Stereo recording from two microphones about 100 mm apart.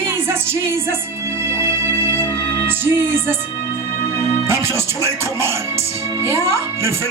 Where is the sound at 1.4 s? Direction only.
25° right (ahead or behind).